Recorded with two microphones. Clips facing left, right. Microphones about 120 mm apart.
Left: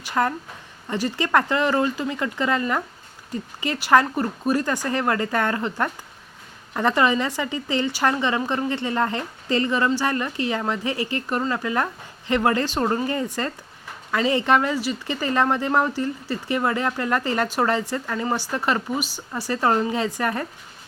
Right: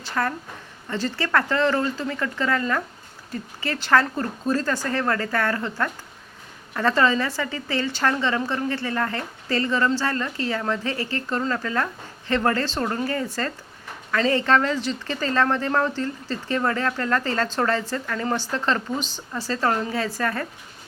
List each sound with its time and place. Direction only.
0.0 s a woman's voice: 15° left (ahead or behind)